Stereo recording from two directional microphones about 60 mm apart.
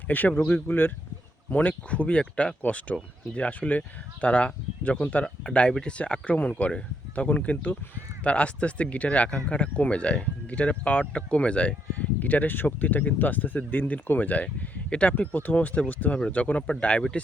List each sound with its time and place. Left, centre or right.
0.1 s speech: left
5.4 s speech: centre